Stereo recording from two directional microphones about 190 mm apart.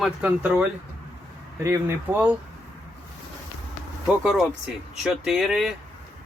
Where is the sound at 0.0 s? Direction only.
5° right (ahead or behind).